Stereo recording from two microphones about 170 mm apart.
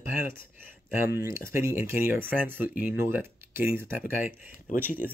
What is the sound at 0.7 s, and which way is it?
Speech, 15° right (ahead or behind).